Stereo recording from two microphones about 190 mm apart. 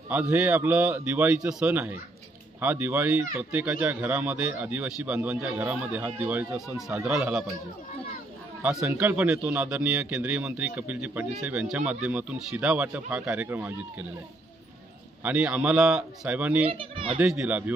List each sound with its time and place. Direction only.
0.1 s speech: 10° right (ahead or behind)
8.7 s speech: 10° right (ahead or behind)
15.2 s speech: 5° right (ahead or behind)
16.7 s speech: 25° right (ahead or behind)
17.2 s speech: 5° right (ahead or behind)